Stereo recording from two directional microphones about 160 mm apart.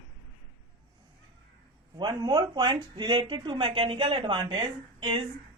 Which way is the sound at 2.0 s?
25° right (ahead or behind).